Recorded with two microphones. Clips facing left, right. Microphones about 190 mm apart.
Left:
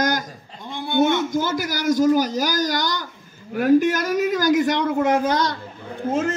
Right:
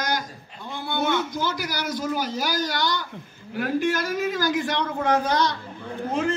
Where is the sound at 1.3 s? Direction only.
50° left (ahead or behind).